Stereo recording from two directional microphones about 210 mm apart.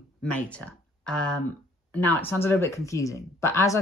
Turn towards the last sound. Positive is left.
turn(degrees=15)  # may be behind; listen again after turning